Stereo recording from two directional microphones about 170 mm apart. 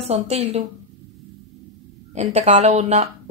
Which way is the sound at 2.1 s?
40° right (ahead or behind).